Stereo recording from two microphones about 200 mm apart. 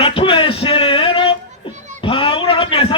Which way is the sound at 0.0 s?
30° left (ahead or behind).